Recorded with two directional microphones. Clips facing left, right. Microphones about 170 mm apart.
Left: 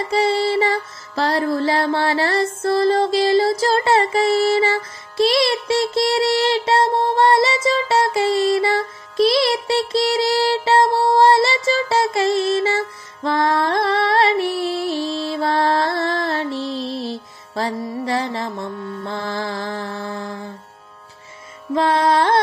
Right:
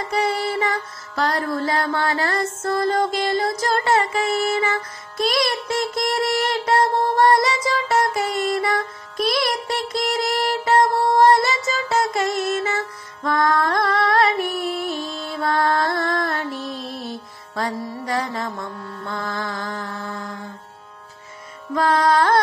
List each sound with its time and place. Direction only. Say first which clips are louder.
0.1 s music: left 5 dB; 30° left (ahead or behind)
19.0 s mantra: left 2 dB; 30° left (ahead or behind)
21.7 s carnatic music: left 1 dB; 25° left (ahead or behind)